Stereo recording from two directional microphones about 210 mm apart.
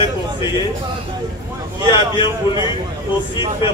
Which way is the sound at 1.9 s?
20° left (ahead or behind).